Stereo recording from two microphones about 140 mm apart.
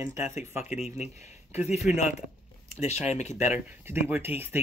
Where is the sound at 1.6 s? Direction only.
Centre (ahead or behind).